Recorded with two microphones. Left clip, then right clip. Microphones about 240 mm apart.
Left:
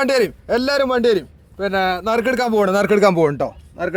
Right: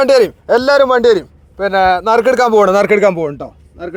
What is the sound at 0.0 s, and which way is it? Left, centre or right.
A man's voice, centre.